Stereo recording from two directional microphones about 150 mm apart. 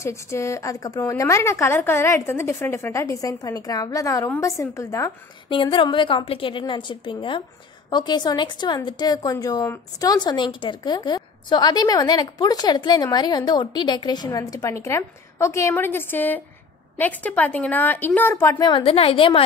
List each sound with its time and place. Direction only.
0.0 s a woman's voice: 20° left (ahead or behind)
5.5 s a woman's voice: 35° left (ahead or behind); by 18.7 s 15° left (ahead or behind)
18.7 s a woman's voice: 40° left (ahead or behind)